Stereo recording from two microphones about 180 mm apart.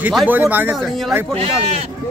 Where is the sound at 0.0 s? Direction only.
5° right (ahead or behind).